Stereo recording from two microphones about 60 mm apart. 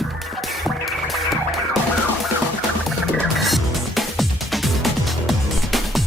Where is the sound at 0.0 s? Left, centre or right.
Centre.